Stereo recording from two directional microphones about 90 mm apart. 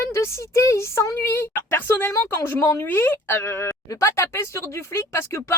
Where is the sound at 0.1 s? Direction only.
30° left (ahead or behind).